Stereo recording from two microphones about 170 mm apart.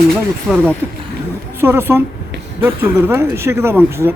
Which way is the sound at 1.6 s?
15° right (ahead or behind).